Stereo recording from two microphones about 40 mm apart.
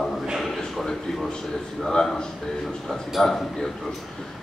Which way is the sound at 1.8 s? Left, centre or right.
Centre.